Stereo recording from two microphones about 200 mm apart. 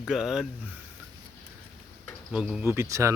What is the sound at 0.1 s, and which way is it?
Speech, centre (ahead or behind).